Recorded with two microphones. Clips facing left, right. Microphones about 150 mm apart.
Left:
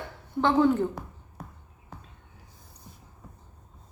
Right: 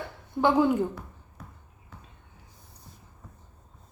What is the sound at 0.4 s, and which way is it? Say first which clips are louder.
Speech: even; 10° right (ahead or behind).